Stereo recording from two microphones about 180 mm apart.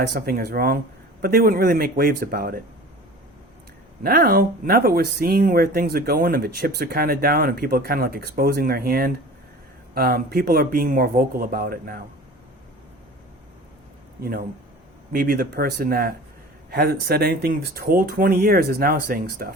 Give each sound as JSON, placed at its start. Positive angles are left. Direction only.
{"t": 0.1, "sound": "speech", "side_deg": -60}
{"t": 4.0, "sound": "speech", "side_deg": -55}
{"t": 14.2, "sound": "speech", "side_deg": -55}